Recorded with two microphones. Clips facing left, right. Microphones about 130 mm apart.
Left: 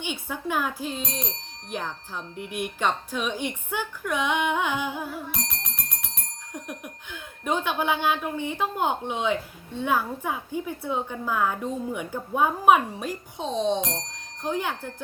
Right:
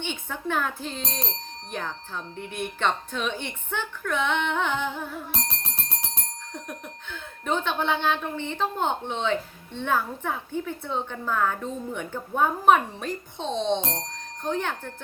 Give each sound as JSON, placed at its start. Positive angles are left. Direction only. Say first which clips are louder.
{"t": 0.0, "sound": "speech", "louder": "left 1 dB", "side_deg": 10}
{"t": 5.3, "sound": "music", "louder": "right 1 dB", "side_deg": -30}
{"t": 6.5, "sound": "speech", "louder": "left 2 dB", "side_deg": 10}